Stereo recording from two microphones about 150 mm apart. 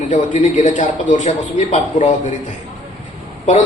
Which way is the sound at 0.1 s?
55° left (ahead or behind).